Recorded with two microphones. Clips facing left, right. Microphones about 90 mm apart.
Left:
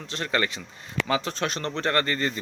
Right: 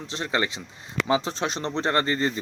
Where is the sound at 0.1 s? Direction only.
20° right (ahead or behind).